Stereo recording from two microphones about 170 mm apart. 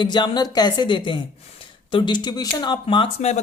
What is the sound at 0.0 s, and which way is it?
Speech, 25° left (ahead or behind).